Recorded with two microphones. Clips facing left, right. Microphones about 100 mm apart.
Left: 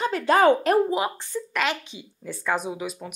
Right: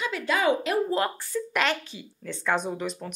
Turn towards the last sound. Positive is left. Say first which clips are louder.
# even
turn(degrees=5)  # may be behind; listen again after turning